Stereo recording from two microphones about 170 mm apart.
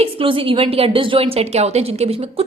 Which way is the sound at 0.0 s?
30° right (ahead or behind).